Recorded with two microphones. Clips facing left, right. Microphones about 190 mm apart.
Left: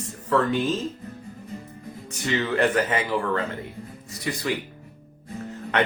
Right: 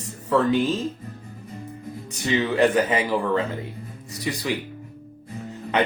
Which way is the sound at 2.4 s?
15° right (ahead or behind).